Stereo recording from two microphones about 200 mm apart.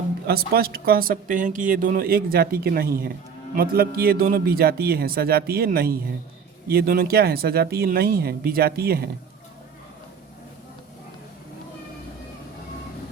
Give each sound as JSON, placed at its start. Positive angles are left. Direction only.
{"t": 0.3, "sound": "speech", "side_deg": -50}